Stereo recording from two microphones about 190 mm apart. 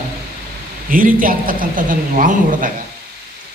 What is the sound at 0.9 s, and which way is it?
A man's voice, 45° right (ahead or behind).